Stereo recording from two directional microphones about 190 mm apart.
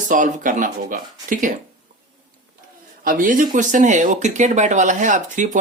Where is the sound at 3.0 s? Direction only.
45° right (ahead or behind).